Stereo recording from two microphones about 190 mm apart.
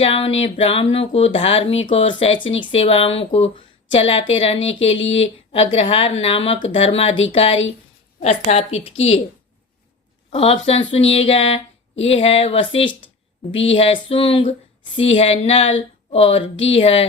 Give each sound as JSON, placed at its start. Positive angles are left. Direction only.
{"t": 0.0, "sound": "speech", "side_deg": 30}
{"t": 10.3, "sound": "speech", "side_deg": 30}
{"t": 13.5, "sound": "speech", "side_deg": 80}
{"t": 13.7, "sound": "speech", "side_deg": 30}